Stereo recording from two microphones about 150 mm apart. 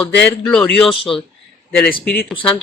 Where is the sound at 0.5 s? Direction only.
5° left (ahead or behind).